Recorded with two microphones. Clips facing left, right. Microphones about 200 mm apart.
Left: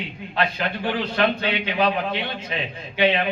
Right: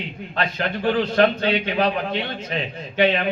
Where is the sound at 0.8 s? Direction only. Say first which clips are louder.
Right 5 dB; 45° right (ahead or behind).